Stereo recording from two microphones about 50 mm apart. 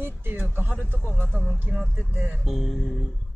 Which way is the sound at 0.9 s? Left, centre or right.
Left.